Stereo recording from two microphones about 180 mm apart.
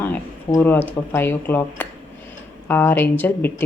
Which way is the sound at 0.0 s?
10° left (ahead or behind).